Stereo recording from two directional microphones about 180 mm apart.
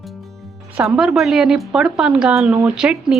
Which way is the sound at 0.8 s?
5° right (ahead or behind).